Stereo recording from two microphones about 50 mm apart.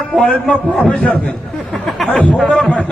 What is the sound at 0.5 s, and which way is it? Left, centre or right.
Speech, left.